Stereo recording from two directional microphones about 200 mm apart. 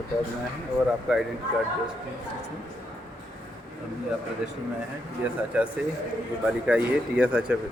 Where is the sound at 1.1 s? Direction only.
Centre (ahead or behind).